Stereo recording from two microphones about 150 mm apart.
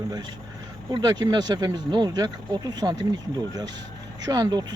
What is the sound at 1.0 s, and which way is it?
Speech, 25° right (ahead or behind).